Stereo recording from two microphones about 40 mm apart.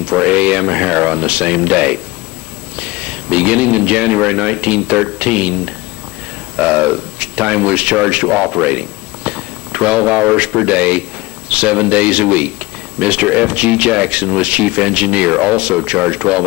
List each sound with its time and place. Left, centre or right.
0.0 s speech: right